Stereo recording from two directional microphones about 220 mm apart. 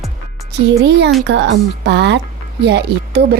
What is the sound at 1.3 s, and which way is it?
Speech, 55° right (ahead or behind).